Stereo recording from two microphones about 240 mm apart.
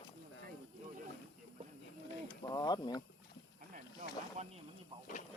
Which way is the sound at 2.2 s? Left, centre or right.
Centre.